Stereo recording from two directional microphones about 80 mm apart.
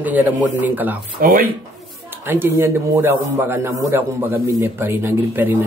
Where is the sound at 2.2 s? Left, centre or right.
Right.